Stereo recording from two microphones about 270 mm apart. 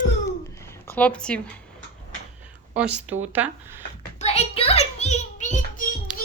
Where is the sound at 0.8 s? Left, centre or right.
Centre.